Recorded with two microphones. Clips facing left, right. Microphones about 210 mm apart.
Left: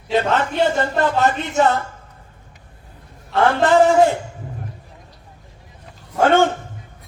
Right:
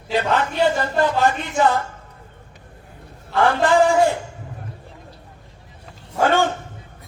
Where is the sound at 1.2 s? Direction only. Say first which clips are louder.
Left 1 dB; 25° left (ahead or behind).